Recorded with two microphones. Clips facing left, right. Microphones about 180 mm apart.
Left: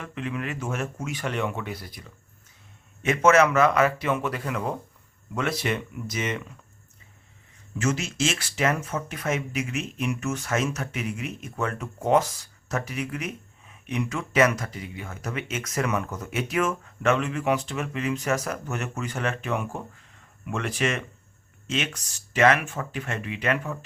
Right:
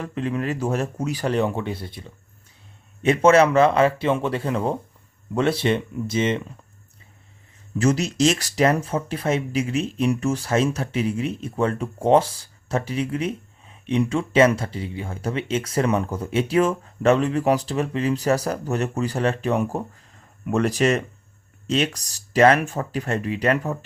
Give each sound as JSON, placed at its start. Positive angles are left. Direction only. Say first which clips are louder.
{"t": 0.0, "sound": "speech", "louder": "right 6 dB", "side_deg": -35}
{"t": 7.8, "sound": "speech", "louder": "right 7 dB", "side_deg": -35}